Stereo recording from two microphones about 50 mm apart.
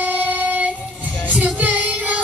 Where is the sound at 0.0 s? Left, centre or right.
Right.